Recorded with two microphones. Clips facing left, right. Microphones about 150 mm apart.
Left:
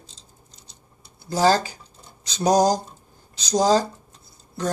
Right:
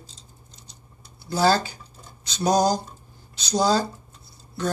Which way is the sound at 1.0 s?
40° left (ahead or behind).